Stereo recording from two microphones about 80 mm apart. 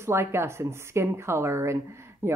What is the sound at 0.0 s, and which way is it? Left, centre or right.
A woman's voice, right.